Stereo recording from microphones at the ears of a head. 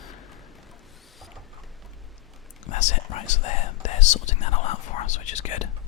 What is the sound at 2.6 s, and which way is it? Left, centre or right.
Speech, left.